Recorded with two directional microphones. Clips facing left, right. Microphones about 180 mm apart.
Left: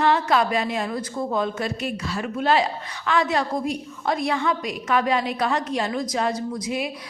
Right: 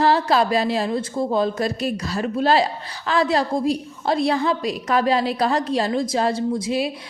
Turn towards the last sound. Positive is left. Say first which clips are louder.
# right 5 dB
turn(degrees=-30)  # may be behind; listen again after turning